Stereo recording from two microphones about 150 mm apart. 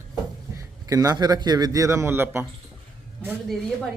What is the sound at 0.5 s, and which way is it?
A man's voice, 20° right (ahead or behind).